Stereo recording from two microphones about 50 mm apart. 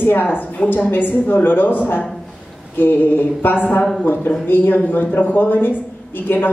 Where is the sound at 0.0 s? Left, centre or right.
Left.